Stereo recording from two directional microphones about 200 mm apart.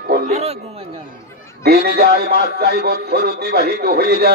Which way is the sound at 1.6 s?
50° right (ahead or behind).